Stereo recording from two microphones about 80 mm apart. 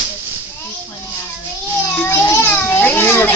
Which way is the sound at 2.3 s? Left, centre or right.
Left.